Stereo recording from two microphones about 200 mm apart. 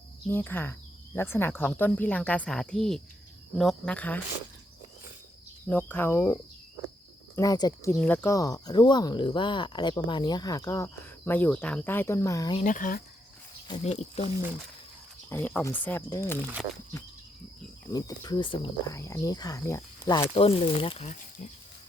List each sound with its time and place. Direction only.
0.3 s speech: 10° left (ahead or behind)
5.6 s speech: 10° left (ahead or behind)
12.5 s speech: 40° left (ahead or behind)
13.7 s speech: 30° left (ahead or behind)
15.3 s speech: 10° left (ahead or behind)
17.9 s speech: 20° left (ahead or behind)